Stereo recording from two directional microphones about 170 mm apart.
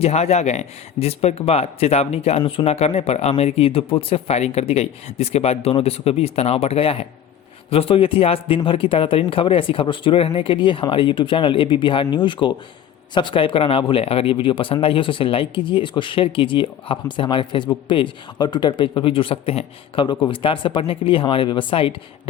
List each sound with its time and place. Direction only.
0.0 s speech: 40° left (ahead or behind)